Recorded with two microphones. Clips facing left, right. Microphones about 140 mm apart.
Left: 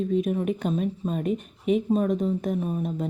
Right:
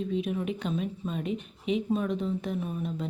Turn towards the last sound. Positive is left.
turn(degrees=45)  # may be behind; listen again after turning